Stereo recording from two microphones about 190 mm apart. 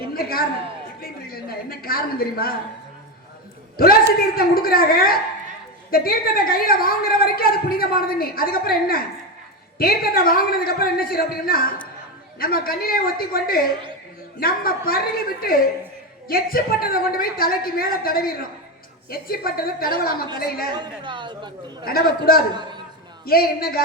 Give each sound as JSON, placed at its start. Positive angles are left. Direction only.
{"t": 0.1, "sound": "a man's voice", "side_deg": 50}
{"t": 4.4, "sound": "a woman's voice", "side_deg": 50}
{"t": 20.7, "sound": "speech", "side_deg": -25}
{"t": 21.8, "sound": "a woman's voice", "side_deg": 50}